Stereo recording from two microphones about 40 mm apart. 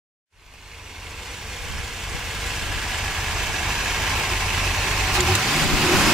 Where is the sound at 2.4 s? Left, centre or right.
Centre.